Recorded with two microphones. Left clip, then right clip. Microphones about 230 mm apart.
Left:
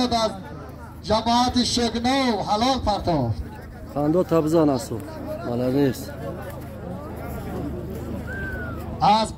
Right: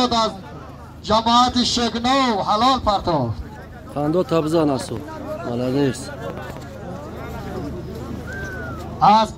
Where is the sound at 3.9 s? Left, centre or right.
Centre.